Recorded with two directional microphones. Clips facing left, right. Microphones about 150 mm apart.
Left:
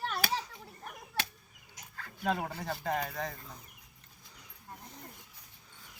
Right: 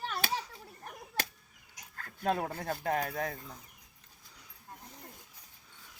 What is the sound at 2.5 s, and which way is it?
Speech, 50° right (ahead or behind).